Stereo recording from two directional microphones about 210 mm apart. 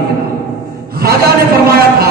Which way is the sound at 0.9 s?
45° right (ahead or behind).